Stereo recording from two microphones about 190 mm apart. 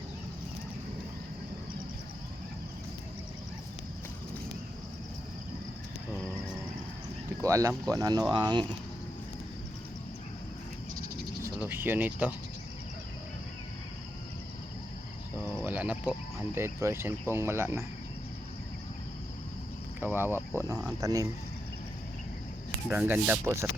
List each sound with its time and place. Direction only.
7.4 s speech: 15° right (ahead or behind)
11.4 s speech: 15° right (ahead or behind)
15.4 s cricket: 10° right (ahead or behind)
16.6 s speech: 15° right (ahead or behind)
20.0 s speech: 10° right (ahead or behind)
22.9 s speech: 10° right (ahead or behind)